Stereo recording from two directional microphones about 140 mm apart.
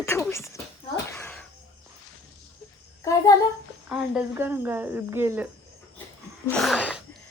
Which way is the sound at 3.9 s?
10° right (ahead or behind).